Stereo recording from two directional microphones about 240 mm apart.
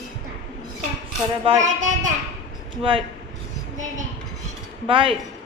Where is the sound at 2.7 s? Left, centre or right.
Right.